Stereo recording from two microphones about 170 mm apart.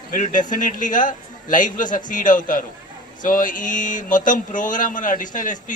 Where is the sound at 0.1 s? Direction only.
50° left (ahead or behind).